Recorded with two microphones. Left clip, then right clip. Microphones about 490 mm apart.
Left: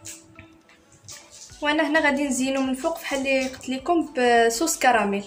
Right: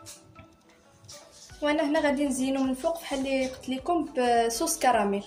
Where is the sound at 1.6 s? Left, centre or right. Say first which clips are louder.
Left 4 dB; right.